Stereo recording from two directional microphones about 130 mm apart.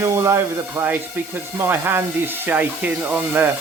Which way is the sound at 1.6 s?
15° right (ahead or behind).